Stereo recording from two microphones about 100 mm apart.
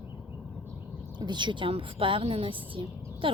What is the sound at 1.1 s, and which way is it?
A woman's voice, 50° right (ahead or behind).